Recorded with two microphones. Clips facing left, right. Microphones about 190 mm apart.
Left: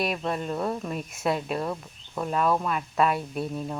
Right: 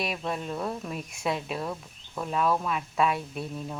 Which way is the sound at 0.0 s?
Centre (ahead or behind).